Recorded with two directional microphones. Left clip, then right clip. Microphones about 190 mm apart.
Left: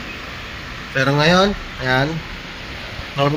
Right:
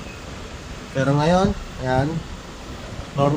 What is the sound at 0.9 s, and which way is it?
Speech, 10° left (ahead or behind).